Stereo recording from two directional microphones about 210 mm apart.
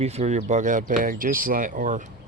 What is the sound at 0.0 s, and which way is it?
Speech, 30° right (ahead or behind).